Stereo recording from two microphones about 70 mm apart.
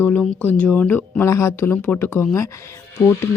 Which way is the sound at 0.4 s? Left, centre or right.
Left.